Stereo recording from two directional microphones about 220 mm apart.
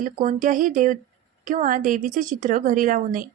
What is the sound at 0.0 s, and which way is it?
Speech, 40° right (ahead or behind).